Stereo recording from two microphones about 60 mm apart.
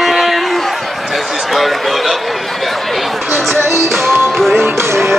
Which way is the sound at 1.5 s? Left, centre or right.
Centre.